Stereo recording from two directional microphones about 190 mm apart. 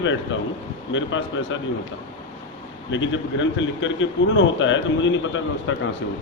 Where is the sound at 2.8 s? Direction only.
80° left.